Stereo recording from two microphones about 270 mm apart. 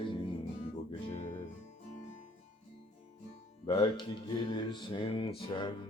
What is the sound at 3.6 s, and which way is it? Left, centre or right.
Speech, centre.